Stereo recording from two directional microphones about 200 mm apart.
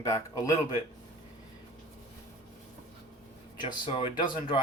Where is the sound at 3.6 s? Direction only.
25° left (ahead or behind).